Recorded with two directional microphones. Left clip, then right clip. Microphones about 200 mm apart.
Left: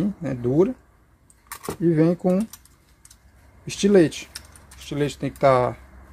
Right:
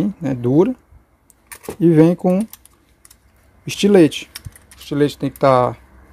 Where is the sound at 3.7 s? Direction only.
35° right (ahead or behind).